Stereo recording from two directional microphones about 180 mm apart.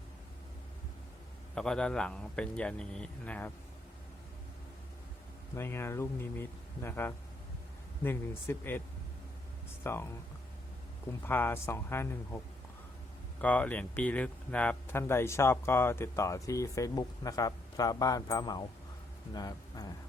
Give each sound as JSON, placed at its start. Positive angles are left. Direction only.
{"t": 1.5, "sound": "speech", "side_deg": 5}
{"t": 5.5, "sound": "speech", "side_deg": 15}
{"t": 9.8, "sound": "speech", "side_deg": 15}
{"t": 11.3, "sound": "speech", "side_deg": 10}
{"t": 13.4, "sound": "speech", "side_deg": 10}